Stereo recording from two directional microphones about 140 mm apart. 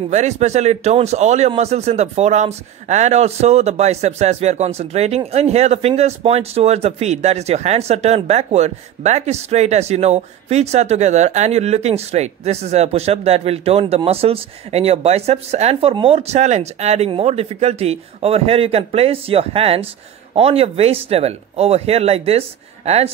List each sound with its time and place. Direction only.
0.1 s speech: 55° right (ahead or behind)